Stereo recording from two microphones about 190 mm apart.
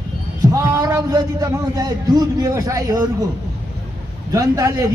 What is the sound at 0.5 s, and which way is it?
A man's voice, 15° right (ahead or behind).